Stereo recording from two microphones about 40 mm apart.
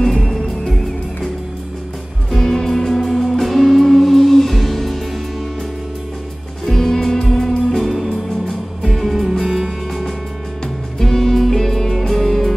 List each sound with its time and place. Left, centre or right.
0.0 s music: centre
2.3 s music: centre
6.6 s music: centre
9.4 s music: centre
11.0 s music: centre